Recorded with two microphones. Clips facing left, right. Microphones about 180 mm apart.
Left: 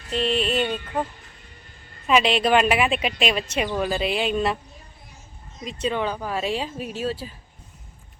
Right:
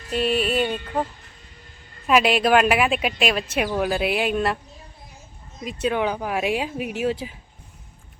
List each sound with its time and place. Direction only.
0.1 s a woman's voice: 5° right (ahead or behind)
2.0 s a woman's voice: 5° right (ahead or behind)
5.9 s speech: 15° right (ahead or behind)